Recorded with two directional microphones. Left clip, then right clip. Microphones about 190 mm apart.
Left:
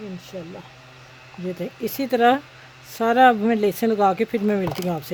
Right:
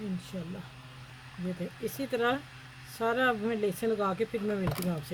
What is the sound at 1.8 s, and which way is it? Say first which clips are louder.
Speech: left 12 dB; 40° left (ahead or behind).